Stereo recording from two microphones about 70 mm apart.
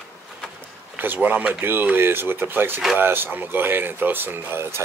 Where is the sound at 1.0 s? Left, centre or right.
Right.